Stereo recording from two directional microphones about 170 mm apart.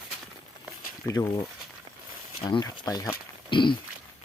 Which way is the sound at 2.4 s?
30° left (ahead or behind).